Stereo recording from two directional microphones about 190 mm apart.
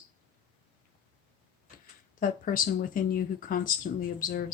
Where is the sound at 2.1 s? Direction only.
45° left (ahead or behind).